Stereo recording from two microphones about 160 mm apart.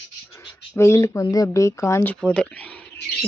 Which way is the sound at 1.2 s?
20° left (ahead or behind).